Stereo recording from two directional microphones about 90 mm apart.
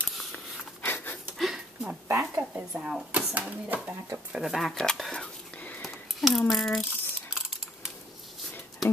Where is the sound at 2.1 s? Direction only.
25° right (ahead or behind).